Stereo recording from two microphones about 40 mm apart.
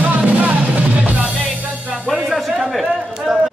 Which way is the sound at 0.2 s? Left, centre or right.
Right.